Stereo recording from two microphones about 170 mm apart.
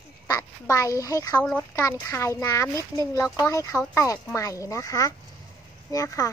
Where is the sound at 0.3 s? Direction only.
20° left (ahead or behind).